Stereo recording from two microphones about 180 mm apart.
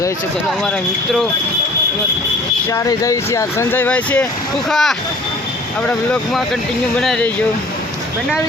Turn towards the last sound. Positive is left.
turn(degrees=5)  # may be behind; listen again after turning